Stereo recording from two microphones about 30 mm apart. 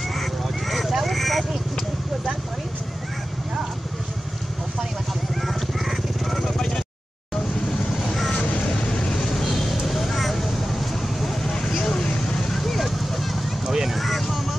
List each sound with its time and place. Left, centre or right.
0.1 s a sound: centre
1.0 s quack: centre
5.3 s vehicle: centre
7.7 s vehicle: centre
8.1 s vehicle: centre
8.4 s vehicle: left
8.6 s vehicle: left
9.4 s vehicle: centre
11.5 s a sound: centre
12.4 s vehicle: centre
13.7 s a sound: centre
13.9 s vehicle: centre